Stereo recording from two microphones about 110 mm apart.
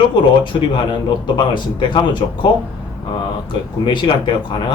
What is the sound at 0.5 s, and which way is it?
Speech, 50° left (ahead or behind).